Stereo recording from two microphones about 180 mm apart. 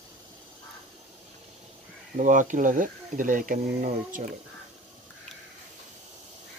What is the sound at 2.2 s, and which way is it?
Speech, 45° right (ahead or behind).